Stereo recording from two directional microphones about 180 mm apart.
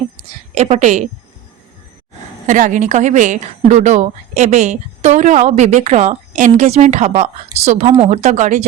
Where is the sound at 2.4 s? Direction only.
45° right (ahead or behind).